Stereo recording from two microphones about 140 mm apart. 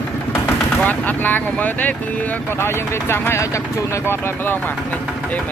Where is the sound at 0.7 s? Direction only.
10° left (ahead or behind).